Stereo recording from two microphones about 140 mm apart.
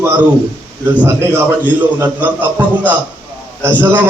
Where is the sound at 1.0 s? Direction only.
20° right (ahead or behind).